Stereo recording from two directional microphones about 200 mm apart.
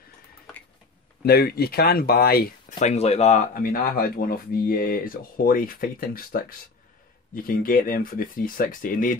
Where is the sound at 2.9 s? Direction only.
30° left (ahead or behind).